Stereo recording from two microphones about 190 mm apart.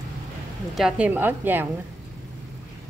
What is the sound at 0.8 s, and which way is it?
Speech, 5° right (ahead or behind).